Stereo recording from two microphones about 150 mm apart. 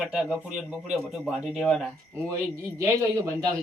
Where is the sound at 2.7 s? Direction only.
20° right (ahead or behind).